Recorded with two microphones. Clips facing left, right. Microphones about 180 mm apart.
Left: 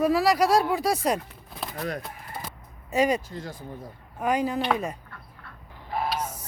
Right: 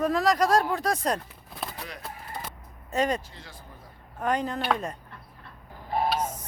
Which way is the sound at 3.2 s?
45° left (ahead or behind).